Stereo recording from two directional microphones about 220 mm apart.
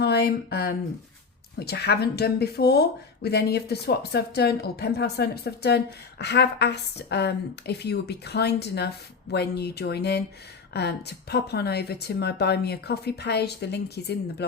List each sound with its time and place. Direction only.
0.0 s speech: 45° left (ahead or behind)